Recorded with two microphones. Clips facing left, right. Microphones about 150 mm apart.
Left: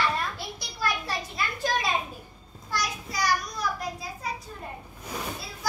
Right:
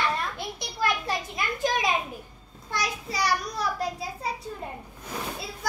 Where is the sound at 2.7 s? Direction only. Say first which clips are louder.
Right 1 dB; 25° right (ahead or behind).